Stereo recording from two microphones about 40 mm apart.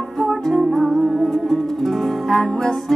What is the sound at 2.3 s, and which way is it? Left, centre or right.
Music, left.